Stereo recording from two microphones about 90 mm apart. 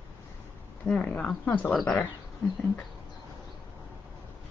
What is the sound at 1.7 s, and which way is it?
Speech, 5° left (ahead or behind).